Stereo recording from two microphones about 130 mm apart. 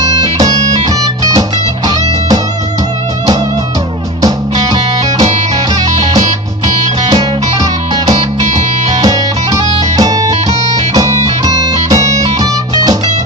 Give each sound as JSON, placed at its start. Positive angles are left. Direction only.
{"t": 0.0, "sound": "music", "side_deg": -30}
{"t": 5.9, "sound": "music", "side_deg": -60}
{"t": 7.1, "sound": "music", "side_deg": -30}
{"t": 8.0, "sound": "music", "side_deg": -60}
{"t": 9.0, "sound": "music", "side_deg": -30}